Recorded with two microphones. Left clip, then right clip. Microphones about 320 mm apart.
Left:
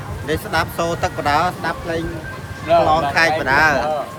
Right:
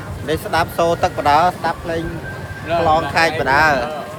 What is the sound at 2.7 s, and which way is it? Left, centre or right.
Speech, left.